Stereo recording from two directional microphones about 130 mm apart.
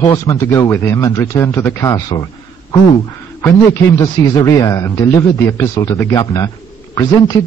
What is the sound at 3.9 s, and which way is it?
A man's voice, 25° left (ahead or behind).